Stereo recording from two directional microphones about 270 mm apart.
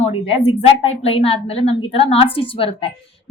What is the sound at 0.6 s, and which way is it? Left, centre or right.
A woman's voice, left.